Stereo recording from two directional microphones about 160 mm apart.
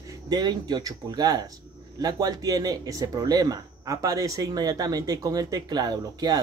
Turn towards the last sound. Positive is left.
turn(degrees=-25)  # may be behind; listen again after turning